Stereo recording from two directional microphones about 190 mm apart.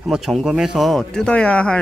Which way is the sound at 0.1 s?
Centre (ahead or behind).